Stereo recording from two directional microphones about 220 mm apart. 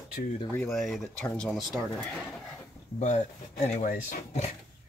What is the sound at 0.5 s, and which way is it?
Speech, 5° left (ahead or behind).